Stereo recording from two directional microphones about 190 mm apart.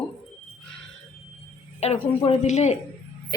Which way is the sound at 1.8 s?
35° left (ahead or behind).